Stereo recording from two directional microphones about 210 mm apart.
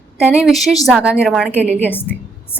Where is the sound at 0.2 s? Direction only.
5° right (ahead or behind).